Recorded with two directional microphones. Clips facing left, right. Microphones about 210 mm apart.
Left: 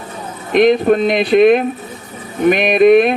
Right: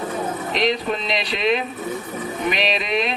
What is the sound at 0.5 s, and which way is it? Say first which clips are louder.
Speech: left 13 dB; 55° left (ahead or behind).